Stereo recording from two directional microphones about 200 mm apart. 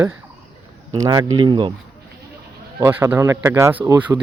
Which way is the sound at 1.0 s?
20° right (ahead or behind).